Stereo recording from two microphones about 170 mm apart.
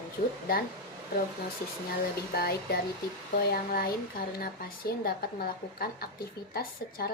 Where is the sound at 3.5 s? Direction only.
60° left (ahead or behind).